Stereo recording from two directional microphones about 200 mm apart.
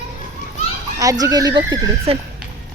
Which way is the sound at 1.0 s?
15° right (ahead or behind).